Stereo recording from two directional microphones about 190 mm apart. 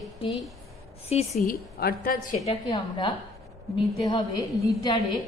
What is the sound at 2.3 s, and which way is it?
Speech, 35° left (ahead or behind).